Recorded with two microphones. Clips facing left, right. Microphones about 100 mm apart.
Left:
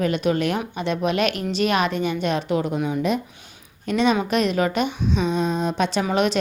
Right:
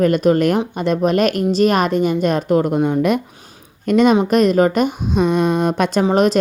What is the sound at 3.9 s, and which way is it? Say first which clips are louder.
A woman's voice: right 7 dB; 50° right (ahead or behind).